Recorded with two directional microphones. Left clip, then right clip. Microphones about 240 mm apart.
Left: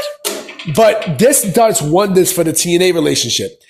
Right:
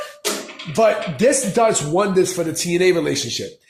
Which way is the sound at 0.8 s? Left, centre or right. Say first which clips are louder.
Left 6 dB; left.